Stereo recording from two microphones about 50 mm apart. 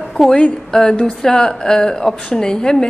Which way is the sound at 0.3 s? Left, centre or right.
Centre.